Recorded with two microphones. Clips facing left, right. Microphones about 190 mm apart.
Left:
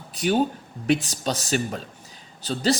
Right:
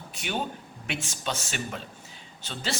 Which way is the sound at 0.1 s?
40° left (ahead or behind).